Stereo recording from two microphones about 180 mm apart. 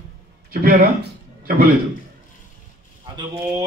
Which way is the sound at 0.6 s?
55° right (ahead or behind).